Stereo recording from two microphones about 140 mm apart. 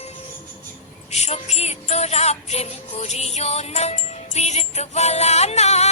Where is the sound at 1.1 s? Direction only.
50° left (ahead or behind).